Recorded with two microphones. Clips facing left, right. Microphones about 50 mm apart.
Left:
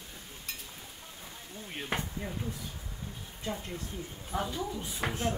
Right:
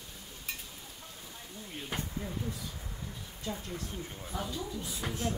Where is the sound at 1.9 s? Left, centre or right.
Left.